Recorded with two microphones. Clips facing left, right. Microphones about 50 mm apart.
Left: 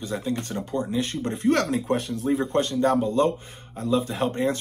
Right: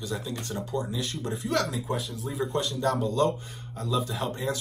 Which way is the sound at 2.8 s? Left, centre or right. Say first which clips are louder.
Left 3 dB; left.